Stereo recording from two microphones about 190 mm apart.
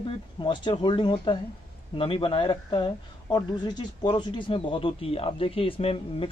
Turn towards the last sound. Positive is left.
turn(degrees=30)  # may be behind; listen again after turning